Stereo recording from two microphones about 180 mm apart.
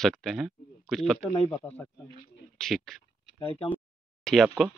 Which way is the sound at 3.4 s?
30° left (ahead or behind).